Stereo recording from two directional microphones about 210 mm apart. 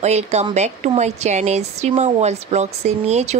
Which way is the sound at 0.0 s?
30° right (ahead or behind).